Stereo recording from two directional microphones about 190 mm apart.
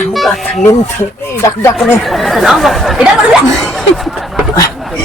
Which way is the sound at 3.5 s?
Centre (ahead or behind).